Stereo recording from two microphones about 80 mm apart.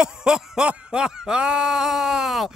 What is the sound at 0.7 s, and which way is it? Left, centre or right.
Speech, centre.